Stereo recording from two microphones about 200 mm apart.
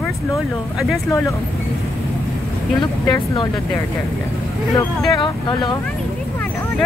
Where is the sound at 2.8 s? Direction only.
20° left (ahead or behind).